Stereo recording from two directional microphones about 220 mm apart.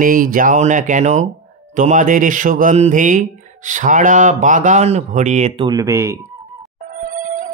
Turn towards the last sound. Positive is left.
turn(degrees=-35)  # may be behind; listen again after turning